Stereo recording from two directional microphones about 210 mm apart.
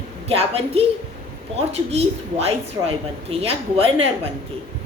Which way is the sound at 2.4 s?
30° right (ahead or behind).